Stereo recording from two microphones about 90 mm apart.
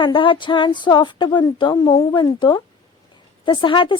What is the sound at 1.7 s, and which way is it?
Speech, 45° left (ahead or behind).